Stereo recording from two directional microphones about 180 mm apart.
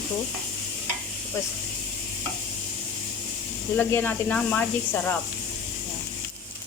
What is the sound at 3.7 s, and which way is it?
Speech, 10° left (ahead or behind).